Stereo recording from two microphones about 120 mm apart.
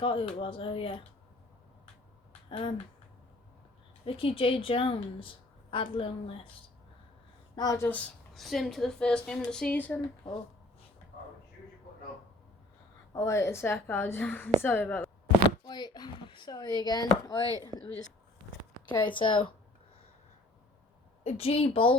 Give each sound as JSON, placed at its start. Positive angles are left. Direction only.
{"t": 0.0, "sound": "a woman's voice", "side_deg": 45}
{"t": 2.5, "sound": "speech", "side_deg": 45}
{"t": 4.0, "sound": "a woman's voice", "side_deg": 50}
{"t": 7.5, "sound": "a woman's voice", "side_deg": 35}
{"t": 7.8, "sound": "a woman's voice", "side_deg": 15}
{"t": 8.3, "sound": "a woman's voice", "side_deg": 0}
{"t": 13.1, "sound": "a woman's voice", "side_deg": 25}
{"t": 15.6, "sound": "speech", "side_deg": 35}
{"t": 18.9, "sound": "a woman's voice", "side_deg": 40}
{"t": 21.2, "sound": "a woman's voice", "side_deg": 55}